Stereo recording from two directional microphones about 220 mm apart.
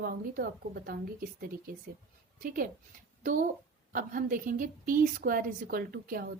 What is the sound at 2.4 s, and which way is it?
A woman's voice, 40° right (ahead or behind).